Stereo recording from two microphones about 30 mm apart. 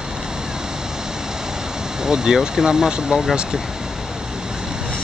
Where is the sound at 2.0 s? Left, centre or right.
Right.